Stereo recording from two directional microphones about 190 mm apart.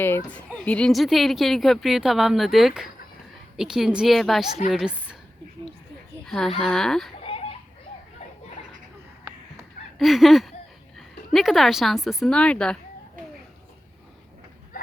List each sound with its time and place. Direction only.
0.0 s speech: 10° left (ahead or behind)
6.2 s speech: centre (ahead or behind)
7.2 s a sound: 30° left (ahead or behind)
10.0 s a woman's voice: centre (ahead or behind)